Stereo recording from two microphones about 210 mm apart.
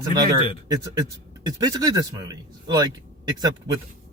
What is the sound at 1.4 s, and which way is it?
Speech, 20° right (ahead or behind).